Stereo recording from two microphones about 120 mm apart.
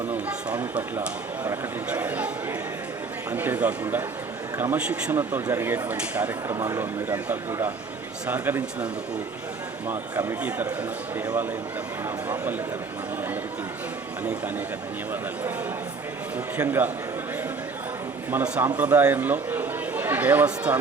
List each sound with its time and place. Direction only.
0.6 s speech: 15° right (ahead or behind)
6.5 s speech: 25° right (ahead or behind)
16.6 s speech: 15° right (ahead or behind)
18.3 s speech: 15° right (ahead or behind)